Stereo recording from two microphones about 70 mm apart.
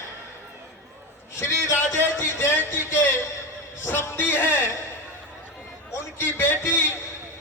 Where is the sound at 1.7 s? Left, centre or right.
Left.